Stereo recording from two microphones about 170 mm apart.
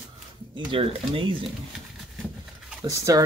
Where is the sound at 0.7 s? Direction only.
30° right (ahead or behind).